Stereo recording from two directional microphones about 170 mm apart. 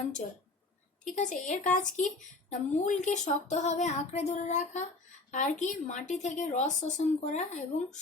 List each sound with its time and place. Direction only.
1.0 s speech: 45° left (ahead or behind)